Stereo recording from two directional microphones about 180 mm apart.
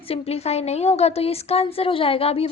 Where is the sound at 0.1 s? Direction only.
35° left (ahead or behind).